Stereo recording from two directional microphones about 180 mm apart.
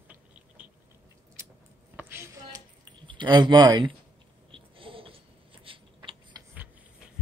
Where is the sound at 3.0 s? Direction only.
25° right (ahead or behind).